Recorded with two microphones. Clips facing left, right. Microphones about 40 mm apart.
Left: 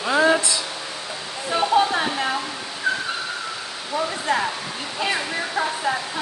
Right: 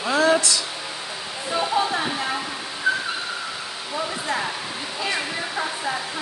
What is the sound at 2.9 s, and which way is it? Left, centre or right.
Whistling, centre.